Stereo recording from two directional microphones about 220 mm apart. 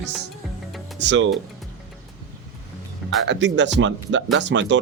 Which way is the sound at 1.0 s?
55° right (ahead or behind).